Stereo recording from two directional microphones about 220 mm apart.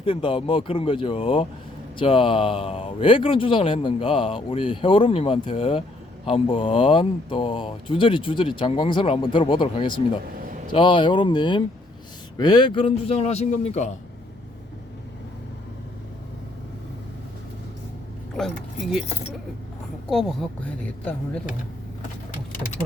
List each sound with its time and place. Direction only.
0.0 s a man's voice: 25° left (ahead or behind)
20.1 s speech: 5° left (ahead or behind)